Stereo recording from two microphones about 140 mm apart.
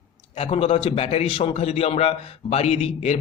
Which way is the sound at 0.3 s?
45° left (ahead or behind).